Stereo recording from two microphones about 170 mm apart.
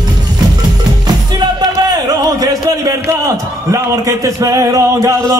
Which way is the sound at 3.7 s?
20° right (ahead or behind).